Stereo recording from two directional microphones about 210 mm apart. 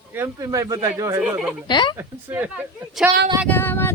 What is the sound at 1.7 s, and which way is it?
Speech, 20° left (ahead or behind).